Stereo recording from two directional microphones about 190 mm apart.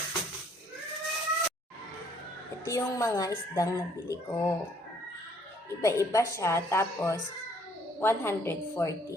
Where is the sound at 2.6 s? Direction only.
15° left (ahead or behind).